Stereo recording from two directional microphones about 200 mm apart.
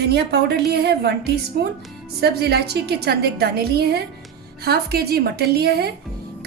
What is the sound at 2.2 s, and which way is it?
A woman's voice, 55° right (ahead or behind).